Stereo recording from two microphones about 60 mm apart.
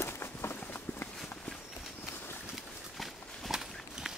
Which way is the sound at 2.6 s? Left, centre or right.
Centre.